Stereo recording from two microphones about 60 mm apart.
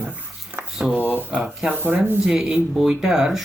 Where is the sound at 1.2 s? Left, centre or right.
Right.